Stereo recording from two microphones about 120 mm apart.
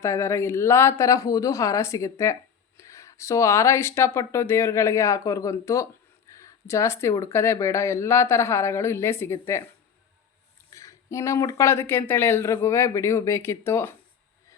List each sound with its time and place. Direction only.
0.0 s a woman's voice: 25° left (ahead or behind)
10.8 s a woman's voice: 25° left (ahead or behind)